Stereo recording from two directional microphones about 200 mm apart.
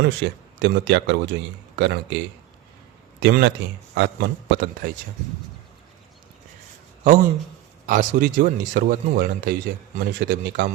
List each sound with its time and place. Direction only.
0.0 s a man's voice: 60° right (ahead or behind)
7.9 s speech: 40° right (ahead or behind)